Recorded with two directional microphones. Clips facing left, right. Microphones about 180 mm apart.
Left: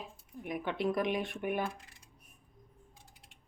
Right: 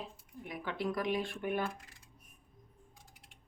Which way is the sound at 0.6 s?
25° left (ahead or behind).